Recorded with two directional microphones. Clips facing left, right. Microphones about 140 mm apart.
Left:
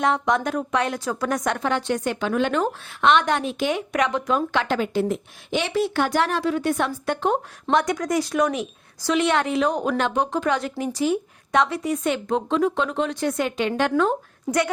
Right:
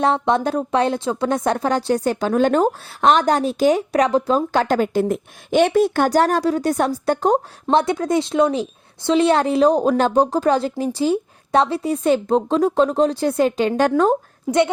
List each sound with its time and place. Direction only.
0.0 s a woman's voice: 30° right (ahead or behind)